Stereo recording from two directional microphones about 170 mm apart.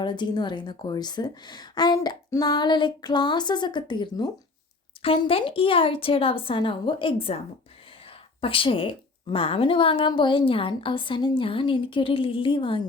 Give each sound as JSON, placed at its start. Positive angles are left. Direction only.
{"t": 0.0, "sound": "a woman's voice", "side_deg": 25}